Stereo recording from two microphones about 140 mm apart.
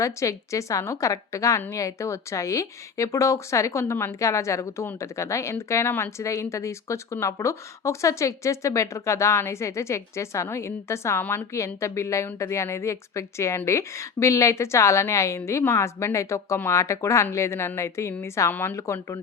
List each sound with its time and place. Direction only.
0.0 s a woman's voice: 20° left (ahead or behind)